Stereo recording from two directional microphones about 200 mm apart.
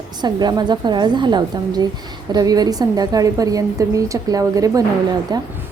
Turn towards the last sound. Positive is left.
turn(degrees=-20)  # may be behind; listen again after turning